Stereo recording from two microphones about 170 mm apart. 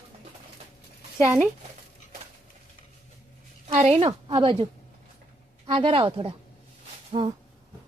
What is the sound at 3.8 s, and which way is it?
Speech, 35° right (ahead or behind).